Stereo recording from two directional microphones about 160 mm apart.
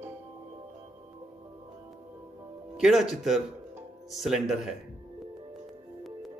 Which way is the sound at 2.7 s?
Centre (ahead or behind).